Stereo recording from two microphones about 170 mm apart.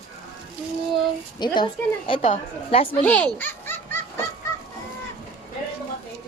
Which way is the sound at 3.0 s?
10° left (ahead or behind).